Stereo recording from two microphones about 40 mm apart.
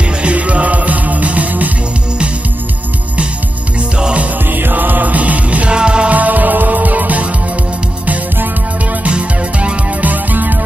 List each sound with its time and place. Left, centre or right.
0.2 s music: right
4.6 s music: right
5.7 s music: right
6.0 s music: right
10.0 s music: right